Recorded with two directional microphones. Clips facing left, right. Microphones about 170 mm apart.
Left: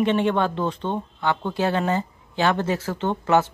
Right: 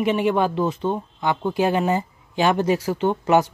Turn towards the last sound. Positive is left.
turn(degrees=-15)  # may be behind; listen again after turning